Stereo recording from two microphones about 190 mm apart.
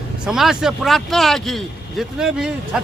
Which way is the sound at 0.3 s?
Centre (ahead or behind).